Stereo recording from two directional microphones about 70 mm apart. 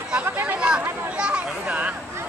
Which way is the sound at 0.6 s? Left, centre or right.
Centre.